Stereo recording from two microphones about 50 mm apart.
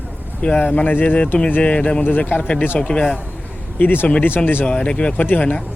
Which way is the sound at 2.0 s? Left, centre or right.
Left.